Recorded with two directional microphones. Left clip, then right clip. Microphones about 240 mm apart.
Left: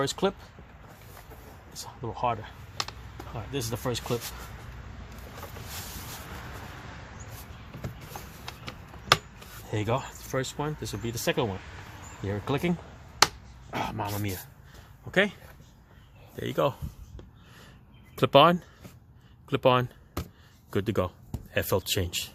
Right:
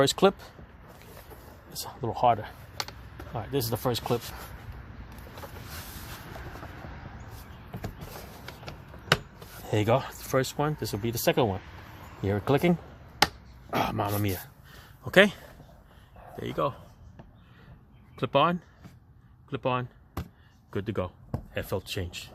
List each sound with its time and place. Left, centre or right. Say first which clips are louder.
0.0 s speech: right 6 dB; right
1.7 s speech: right 4 dB; right
9.6 s speech: right 5 dB; right
16.4 s speech: left 3 dB; centre
18.2 s speech: left 5 dB; centre
19.5 s chop: left 7 dB; left
20.7 s speech: left 4 dB; centre